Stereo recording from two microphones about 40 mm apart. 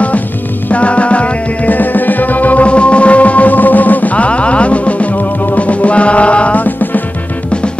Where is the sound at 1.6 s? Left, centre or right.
Left.